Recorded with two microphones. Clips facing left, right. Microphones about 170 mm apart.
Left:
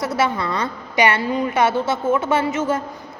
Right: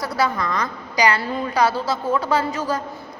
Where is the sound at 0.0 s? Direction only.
25° left (ahead or behind).